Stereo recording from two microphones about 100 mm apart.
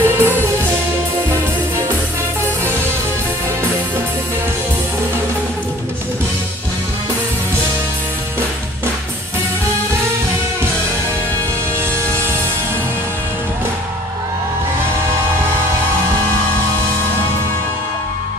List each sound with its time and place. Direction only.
0.0 s music: 25° right (ahead or behind)